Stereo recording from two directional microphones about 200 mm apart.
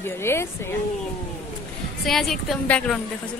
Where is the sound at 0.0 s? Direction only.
10° left (ahead or behind).